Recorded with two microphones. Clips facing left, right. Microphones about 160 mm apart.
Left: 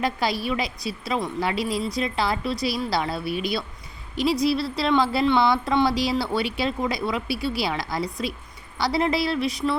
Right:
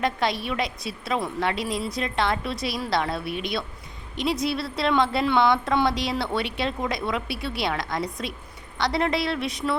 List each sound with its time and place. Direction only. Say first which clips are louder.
0.0 s a woman's voice: even; 5° left (ahead or behind)